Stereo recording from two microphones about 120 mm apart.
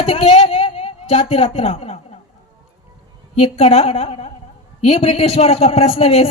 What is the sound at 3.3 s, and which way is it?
A man's voice, 55° left (ahead or behind).